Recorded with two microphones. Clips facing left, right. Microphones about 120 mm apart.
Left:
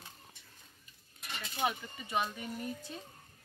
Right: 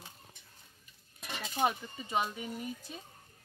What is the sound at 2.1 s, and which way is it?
Speech, 20° right (ahead or behind).